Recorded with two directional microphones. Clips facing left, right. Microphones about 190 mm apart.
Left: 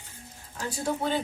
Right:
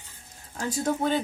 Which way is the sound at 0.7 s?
45° right (ahead or behind).